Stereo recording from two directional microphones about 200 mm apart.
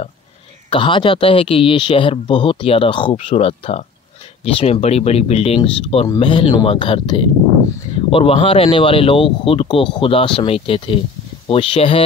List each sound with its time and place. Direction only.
0.7 s speech: 25° left (ahead or behind)